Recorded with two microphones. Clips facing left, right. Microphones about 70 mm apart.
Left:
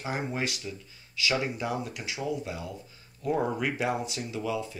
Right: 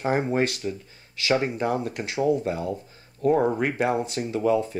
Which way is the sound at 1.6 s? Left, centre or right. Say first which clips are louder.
Right 7 dB; right.